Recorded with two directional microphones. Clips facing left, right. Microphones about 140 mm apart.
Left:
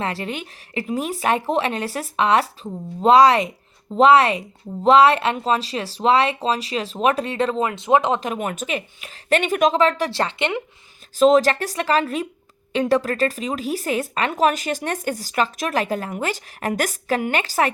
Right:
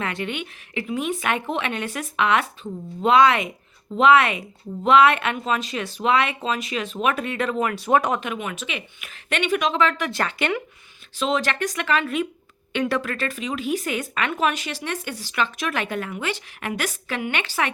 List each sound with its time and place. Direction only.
0.0 s speech: 35° left (ahead or behind)
8.2 s speech: 40° left (ahead or behind); by 10.6 s 25° left (ahead or behind)
11.2 s speech: 40° left (ahead or behind)